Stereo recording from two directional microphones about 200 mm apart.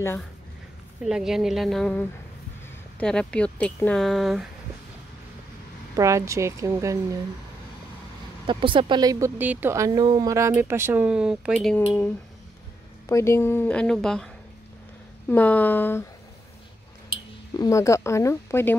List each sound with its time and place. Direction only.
1.0 s speech: centre (ahead or behind)
5.9 s speech: 15° right (ahead or behind)
8.5 s speech: 25° right (ahead or behind); by 11.8 s centre (ahead or behind)
13.1 s a woman's voice: 15° left (ahead or behind)
17.6 s a woman's voice: 15° left (ahead or behind)